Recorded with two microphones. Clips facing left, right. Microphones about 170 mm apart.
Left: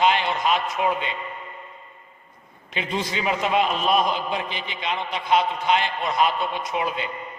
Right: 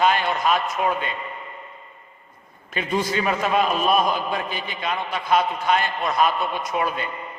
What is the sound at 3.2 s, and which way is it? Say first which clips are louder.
A man's voice: left 2 dB; 20° left (ahead or behind).